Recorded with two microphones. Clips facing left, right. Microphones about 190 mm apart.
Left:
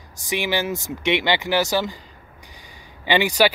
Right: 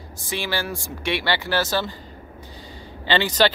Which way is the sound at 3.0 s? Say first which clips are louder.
Left 2 dB; 15° left (ahead or behind).